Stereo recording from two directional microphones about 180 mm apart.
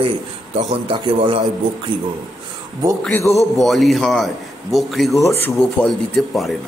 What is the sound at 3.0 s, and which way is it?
Speech, 10° left (ahead or behind).